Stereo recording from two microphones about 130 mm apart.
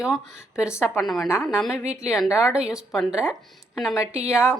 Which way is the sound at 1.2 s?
20° left (ahead or behind).